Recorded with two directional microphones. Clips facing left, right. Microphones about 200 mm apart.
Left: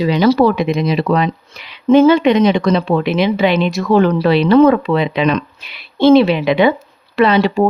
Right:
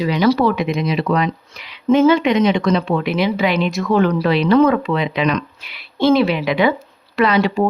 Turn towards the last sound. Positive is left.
turn(degrees=35)  # may be behind; listen again after turning